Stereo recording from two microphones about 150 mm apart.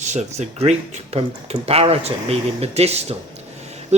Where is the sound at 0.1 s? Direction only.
50° right (ahead or behind).